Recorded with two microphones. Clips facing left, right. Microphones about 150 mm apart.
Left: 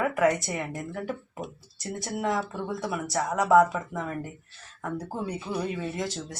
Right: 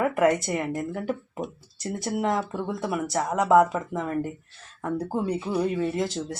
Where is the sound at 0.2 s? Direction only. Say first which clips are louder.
Right 2 dB; 25° right (ahead or behind).